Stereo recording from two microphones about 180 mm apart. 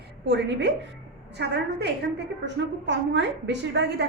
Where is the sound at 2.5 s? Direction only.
80° right.